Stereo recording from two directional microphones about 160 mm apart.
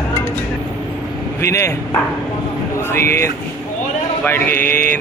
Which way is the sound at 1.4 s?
20° left (ahead or behind).